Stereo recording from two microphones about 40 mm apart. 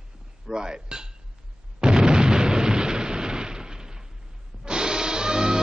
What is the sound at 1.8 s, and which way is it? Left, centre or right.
Explosion, centre.